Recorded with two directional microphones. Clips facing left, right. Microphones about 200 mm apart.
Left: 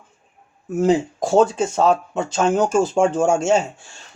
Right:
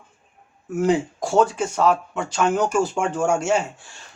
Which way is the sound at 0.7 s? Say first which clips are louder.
Left 3 dB; 20° left (ahead or behind).